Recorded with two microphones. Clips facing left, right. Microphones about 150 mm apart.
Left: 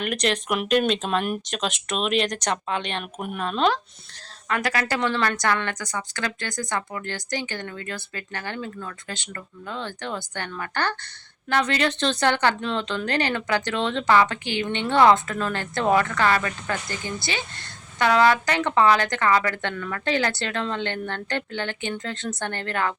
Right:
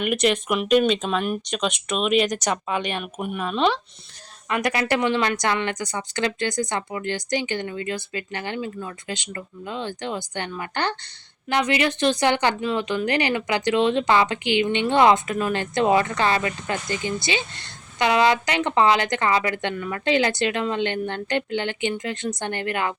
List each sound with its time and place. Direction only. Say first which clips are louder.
0.0 s speech: right 4 dB; 5° right (ahead or behind)
4.4 s a woman's voice: right 2 dB; 20° right (ahead or behind)